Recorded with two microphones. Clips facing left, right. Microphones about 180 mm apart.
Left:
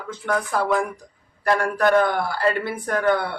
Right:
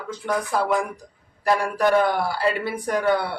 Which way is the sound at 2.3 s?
10° right (ahead or behind).